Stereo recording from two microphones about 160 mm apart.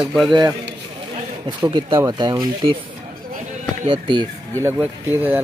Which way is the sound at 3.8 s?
30° right (ahead or behind).